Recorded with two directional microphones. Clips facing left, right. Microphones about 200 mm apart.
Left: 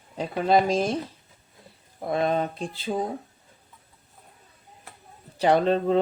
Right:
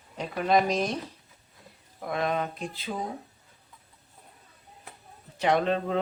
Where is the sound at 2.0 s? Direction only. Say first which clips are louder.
Left 4 dB; 30° left (ahead or behind).